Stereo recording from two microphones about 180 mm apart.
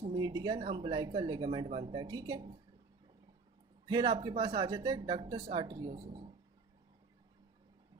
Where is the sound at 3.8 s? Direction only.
20° right (ahead or behind).